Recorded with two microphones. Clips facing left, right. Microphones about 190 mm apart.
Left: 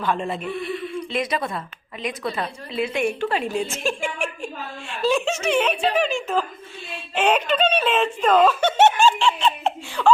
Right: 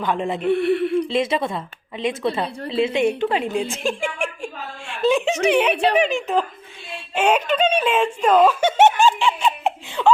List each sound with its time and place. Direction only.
0.0 s speech: 15° right (ahead or behind)
0.4 s speech: 65° right (ahead or behind)
1.1 s a woman's voice: 25° right (ahead or behind)
5.7 s speech: 65° right (ahead or behind)
6.0 s speech: 15° right (ahead or behind)